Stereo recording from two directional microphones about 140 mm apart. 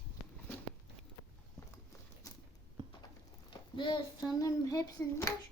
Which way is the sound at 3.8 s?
35° left (ahead or behind).